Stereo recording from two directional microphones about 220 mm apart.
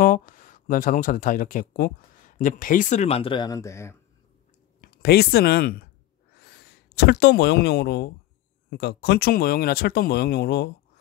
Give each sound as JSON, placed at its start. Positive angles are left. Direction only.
{"t": 0.0, "sound": "speech", "side_deg": 40}
{"t": 4.8, "sound": "speech", "side_deg": 45}